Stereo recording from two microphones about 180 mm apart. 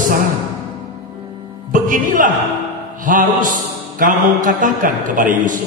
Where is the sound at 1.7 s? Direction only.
50° right (ahead or behind).